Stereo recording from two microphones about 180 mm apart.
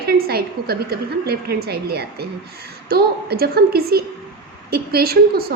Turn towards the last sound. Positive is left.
turn(degrees=-60)  # may be behind; listen again after turning